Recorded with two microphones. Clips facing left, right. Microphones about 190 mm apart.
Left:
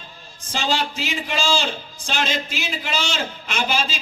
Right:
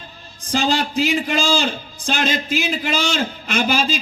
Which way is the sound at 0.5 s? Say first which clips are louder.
Right 5 dB; 45° right (ahead or behind).